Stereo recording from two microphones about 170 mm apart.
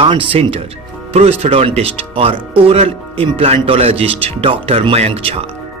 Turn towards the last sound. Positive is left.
turn(degrees=-35)  # may be behind; listen again after turning